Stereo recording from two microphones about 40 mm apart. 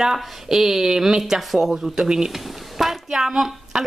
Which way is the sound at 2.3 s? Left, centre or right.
Centre.